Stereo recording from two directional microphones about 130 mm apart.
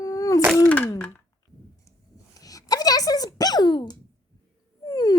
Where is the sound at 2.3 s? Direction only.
25° left (ahead or behind).